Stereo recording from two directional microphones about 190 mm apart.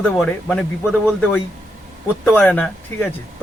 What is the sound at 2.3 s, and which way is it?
Speech, 10° left (ahead or behind).